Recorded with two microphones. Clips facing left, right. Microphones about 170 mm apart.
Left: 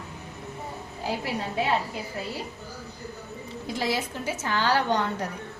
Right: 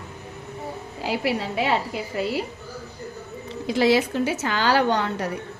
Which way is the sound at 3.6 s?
85° right.